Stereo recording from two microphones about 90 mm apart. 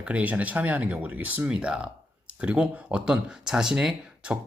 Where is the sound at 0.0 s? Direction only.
15° right (ahead or behind).